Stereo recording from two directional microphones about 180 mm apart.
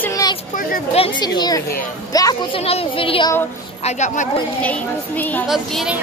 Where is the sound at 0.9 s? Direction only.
30° left (ahead or behind).